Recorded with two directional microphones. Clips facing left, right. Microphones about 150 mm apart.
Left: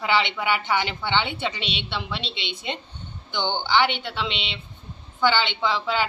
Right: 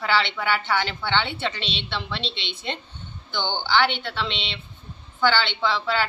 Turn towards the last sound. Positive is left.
turn(degrees=15)  # may be behind; listen again after turning